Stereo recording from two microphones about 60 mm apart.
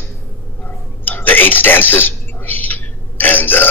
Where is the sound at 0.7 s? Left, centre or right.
Left.